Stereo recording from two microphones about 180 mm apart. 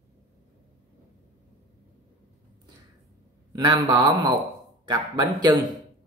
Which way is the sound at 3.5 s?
20° right (ahead or behind).